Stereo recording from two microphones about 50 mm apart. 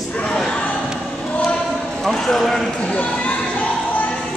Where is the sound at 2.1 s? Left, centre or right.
Centre.